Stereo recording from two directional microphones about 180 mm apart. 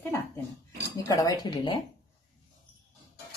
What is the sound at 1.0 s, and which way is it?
Speech, 20° left (ahead or behind).